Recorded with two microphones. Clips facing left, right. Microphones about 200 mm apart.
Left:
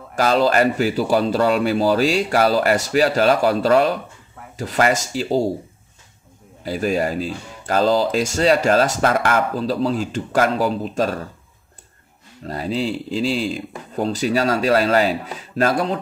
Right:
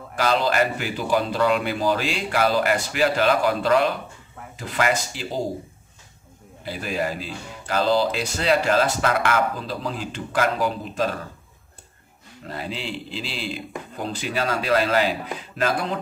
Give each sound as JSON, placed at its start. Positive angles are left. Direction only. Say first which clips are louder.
{"t": 0.1, "sound": "speech", "louder": "left 5 dB", "side_deg": 40}
{"t": 6.6, "sound": "speech", "louder": "left 6 dB", "side_deg": 40}
{"t": 12.4, "sound": "speech", "louder": "left 8 dB", "side_deg": 40}